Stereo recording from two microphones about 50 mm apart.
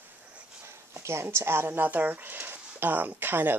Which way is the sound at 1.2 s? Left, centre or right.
Right.